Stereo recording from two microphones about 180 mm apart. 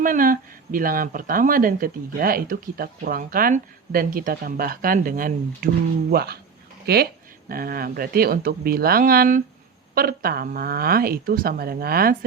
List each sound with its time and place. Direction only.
0.0 s speech: 50° right (ahead or behind)